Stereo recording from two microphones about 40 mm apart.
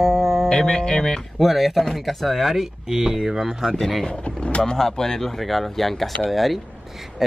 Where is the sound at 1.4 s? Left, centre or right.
Centre.